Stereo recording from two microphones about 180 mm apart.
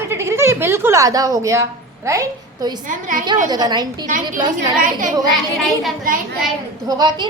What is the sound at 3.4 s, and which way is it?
Speech, 20° right (ahead or behind).